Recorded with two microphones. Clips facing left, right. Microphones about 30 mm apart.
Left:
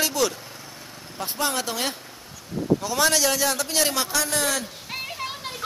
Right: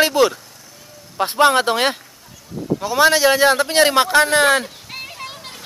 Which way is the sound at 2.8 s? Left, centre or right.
Right.